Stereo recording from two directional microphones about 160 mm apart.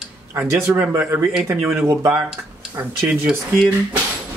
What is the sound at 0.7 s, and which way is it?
Speech, 15° right (ahead or behind).